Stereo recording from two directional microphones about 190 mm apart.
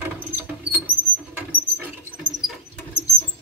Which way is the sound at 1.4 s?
10° right (ahead or behind).